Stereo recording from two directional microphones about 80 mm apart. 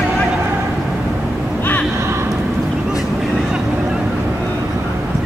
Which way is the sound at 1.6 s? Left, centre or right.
Left.